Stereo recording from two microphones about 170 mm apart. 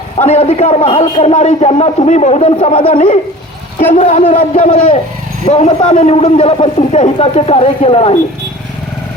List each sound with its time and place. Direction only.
0.2 s a man's voice: 40° left (ahead or behind)